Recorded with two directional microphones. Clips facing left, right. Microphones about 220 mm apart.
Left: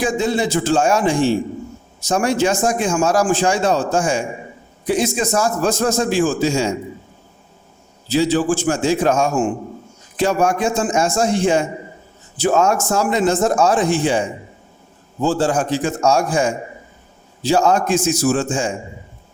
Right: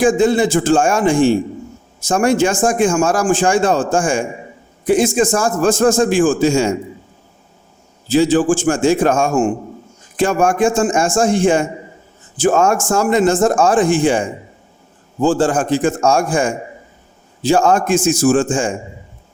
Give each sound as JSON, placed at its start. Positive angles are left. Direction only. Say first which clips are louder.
{"t": 0.0, "sound": "a man's voice", "louder": "right 6 dB", "side_deg": -50}
{"t": 8.0, "sound": "a man's voice", "louder": "right 4 dB", "side_deg": -50}